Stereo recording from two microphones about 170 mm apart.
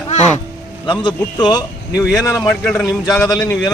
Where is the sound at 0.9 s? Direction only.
25° left (ahead or behind).